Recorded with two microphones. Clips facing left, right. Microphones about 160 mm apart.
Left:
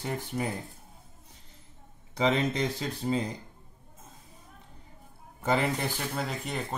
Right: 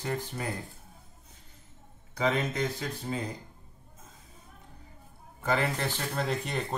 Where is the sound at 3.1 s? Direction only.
15° left (ahead or behind).